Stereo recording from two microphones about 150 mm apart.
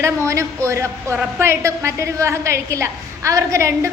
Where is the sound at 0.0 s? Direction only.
20° right (ahead or behind).